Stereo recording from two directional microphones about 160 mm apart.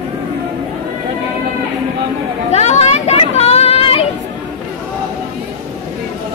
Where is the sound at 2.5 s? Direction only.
45° left (ahead or behind).